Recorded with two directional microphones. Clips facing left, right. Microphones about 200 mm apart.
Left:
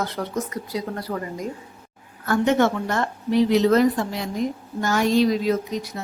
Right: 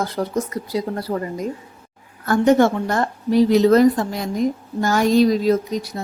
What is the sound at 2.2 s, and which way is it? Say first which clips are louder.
A woman's voice: right 4 dB; 40° right (ahead or behind).